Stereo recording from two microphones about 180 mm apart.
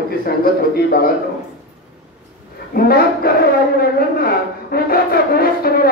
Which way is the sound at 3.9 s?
55° left (ahead or behind).